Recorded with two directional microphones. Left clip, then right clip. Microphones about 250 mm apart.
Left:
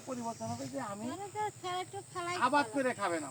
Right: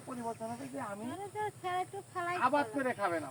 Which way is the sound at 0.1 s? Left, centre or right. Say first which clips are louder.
Even; left.